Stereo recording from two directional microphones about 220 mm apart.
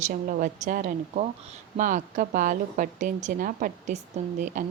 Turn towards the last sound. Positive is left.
turn(degrees=-35)  # may be behind; listen again after turning